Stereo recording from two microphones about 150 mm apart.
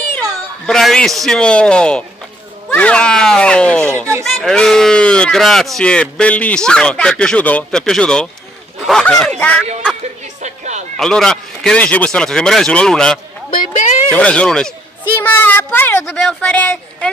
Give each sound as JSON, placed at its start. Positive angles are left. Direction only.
{"t": 0.2, "sound": "speech", "side_deg": 0}
{"t": 10.2, "sound": "music", "side_deg": -50}
{"t": 11.0, "sound": "speech", "side_deg": 5}
{"t": 13.6, "sound": "a sound", "side_deg": 55}
{"t": 14.1, "sound": "speech", "side_deg": 10}